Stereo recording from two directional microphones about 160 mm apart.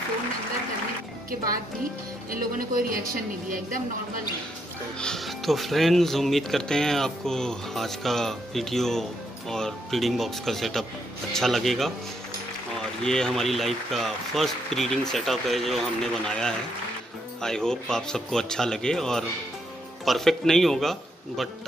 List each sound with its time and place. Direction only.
2.7 s a woman's voice: 60° right (ahead or behind)
4.9 s speech: 5° left (ahead or behind)
13.0 s speech: 5° left (ahead or behind)